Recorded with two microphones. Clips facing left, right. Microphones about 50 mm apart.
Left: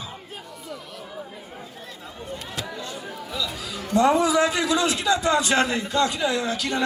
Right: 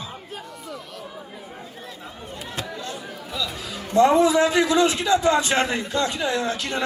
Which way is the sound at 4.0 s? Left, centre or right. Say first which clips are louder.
Right 3 dB; right.